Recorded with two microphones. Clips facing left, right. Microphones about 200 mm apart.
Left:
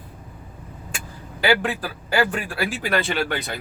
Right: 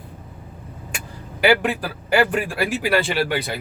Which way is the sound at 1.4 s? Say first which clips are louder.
Right 3 dB; 15° right (ahead or behind).